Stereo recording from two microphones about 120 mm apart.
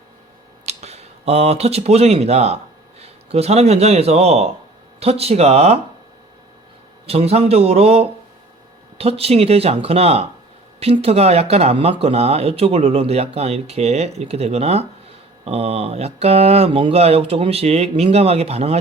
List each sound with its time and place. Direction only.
0.6 s speech: 65° right (ahead or behind)
7.1 s speech: 60° right (ahead or behind)